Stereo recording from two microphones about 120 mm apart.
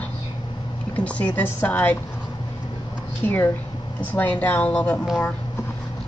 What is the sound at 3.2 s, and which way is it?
Speech, 15° left (ahead or behind).